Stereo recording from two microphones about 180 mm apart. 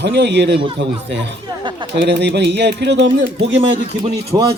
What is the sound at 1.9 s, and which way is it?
Speech, 75° right (ahead or behind).